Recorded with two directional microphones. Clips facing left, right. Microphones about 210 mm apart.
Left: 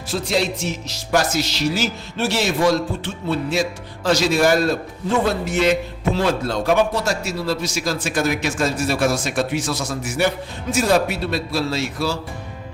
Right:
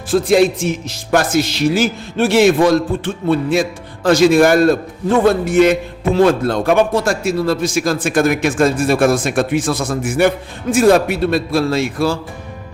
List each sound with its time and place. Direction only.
0.1 s a man's voice: 50° right (ahead or behind)